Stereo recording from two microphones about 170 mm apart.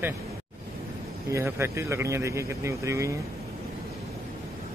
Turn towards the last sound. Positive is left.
turn(degrees=-15)  # may be behind; listen again after turning